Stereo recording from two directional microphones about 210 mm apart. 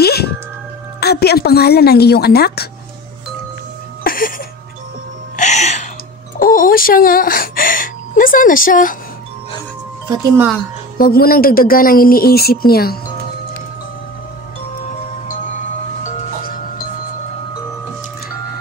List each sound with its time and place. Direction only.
0.0 s music: 50° left (ahead or behind)
1.0 s a woman's voice: 50° left (ahead or behind)
4.0 s music: 45° left (ahead or behind)
5.3 s music: 35° left (ahead or behind)
6.4 s speech: 40° left (ahead or behind)
10.0 s speech: 10° right (ahead or behind)
11.0 s a woman's voice: 45° left (ahead or behind)
16.0 s music: 40° left (ahead or behind)